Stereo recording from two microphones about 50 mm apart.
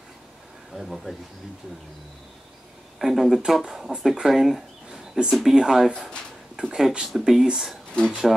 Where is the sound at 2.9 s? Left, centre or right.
Centre.